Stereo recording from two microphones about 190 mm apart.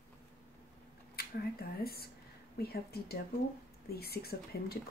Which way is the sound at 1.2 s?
55° left (ahead or behind).